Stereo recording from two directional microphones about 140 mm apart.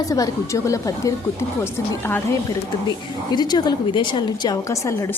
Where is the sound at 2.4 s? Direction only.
30° left (ahead or behind).